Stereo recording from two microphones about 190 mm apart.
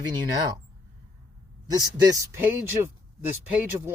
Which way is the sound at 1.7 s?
20° right (ahead or behind).